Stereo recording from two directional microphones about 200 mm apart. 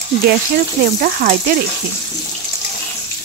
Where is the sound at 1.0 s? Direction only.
45° right (ahead or behind).